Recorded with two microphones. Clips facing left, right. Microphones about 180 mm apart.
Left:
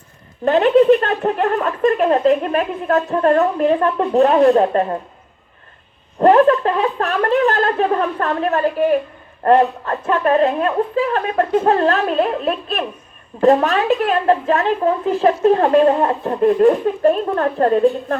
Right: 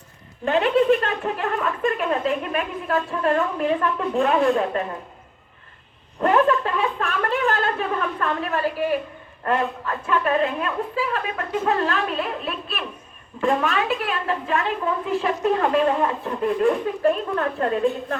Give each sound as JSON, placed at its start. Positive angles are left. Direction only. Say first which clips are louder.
{"t": 0.4, "sound": "speech", "louder": "left 7 dB", "side_deg": 35}
{"t": 6.2, "sound": "a sound", "louder": "left 7 dB", "side_deg": 35}
{"t": 9.4, "sound": "speech", "louder": "left 10 dB", "side_deg": 40}